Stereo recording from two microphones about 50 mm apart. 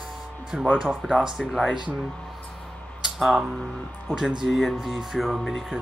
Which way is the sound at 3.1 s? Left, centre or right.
Centre.